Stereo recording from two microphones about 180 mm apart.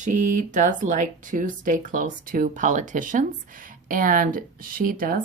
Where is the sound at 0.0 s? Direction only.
45° right (ahead or behind).